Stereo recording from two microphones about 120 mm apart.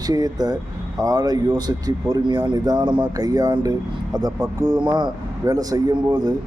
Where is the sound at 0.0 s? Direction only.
35° right (ahead or behind).